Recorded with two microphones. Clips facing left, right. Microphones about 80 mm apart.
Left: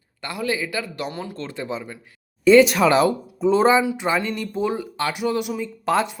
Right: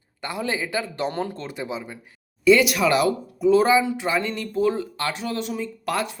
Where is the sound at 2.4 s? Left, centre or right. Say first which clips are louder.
Left 4 dB; left.